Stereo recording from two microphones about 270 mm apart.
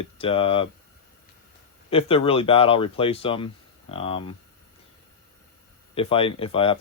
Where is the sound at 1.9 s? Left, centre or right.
Left.